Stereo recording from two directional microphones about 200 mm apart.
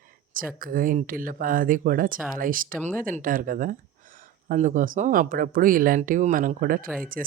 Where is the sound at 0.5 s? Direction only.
45° right (ahead or behind).